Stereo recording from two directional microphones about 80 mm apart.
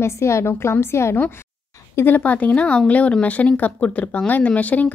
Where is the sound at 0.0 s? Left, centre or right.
Left.